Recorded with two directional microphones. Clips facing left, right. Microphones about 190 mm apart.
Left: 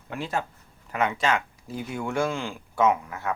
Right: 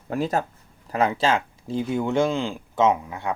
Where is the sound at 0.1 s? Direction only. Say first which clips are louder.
Right 6 dB; 40° right (ahead or behind).